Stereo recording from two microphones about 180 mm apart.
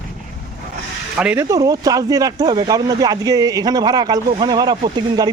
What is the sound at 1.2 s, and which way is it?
Speech, 5° right (ahead or behind).